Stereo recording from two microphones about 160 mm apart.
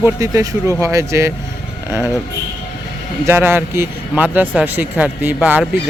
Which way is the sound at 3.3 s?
15° right (ahead or behind).